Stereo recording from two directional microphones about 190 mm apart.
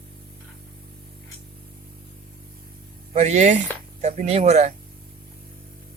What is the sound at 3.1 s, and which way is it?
Speech, 35° right (ahead or behind).